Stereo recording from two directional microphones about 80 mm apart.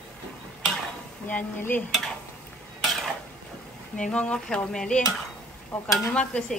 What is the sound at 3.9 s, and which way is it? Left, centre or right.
Speech, centre.